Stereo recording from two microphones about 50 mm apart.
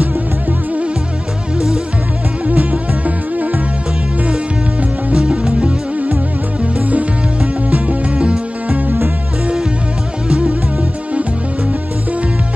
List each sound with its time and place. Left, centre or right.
0.0 s music: right
2.4 s music: right
5.1 s music: centre
6.6 s music: right
10.2 s music: centre